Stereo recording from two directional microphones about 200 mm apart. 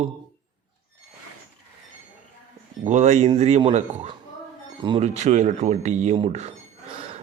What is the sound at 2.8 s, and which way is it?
Speech, 35° right (ahead or behind).